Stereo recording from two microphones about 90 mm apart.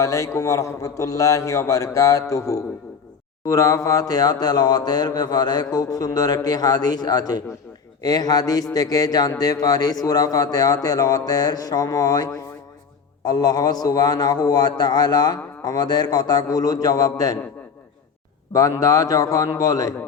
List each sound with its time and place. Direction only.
0.0 s a man's voice: 35° left (ahead or behind)
3.4 s a man's voice: 35° left (ahead or behind)
18.5 s a man's voice: 35° left (ahead or behind)